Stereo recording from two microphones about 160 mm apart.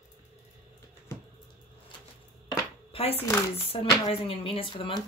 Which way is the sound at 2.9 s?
35° left (ahead or behind).